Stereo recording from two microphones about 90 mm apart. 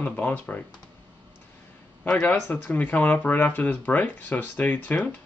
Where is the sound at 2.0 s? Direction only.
20° left (ahead or behind).